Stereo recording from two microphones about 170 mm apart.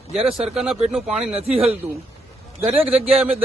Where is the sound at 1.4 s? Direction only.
35° right (ahead or behind).